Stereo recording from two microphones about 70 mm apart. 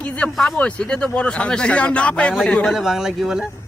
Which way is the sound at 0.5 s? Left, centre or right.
Centre.